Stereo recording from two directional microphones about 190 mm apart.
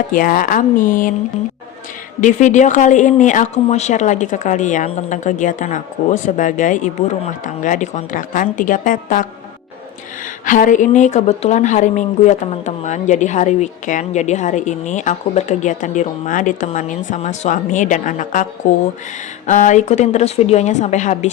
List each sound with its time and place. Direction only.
0.1 s a woman's voice: 45° left (ahead or behind)
2.2 s a woman's voice: 40° left (ahead or behind)
10.4 s a woman's voice: 45° left (ahead or behind)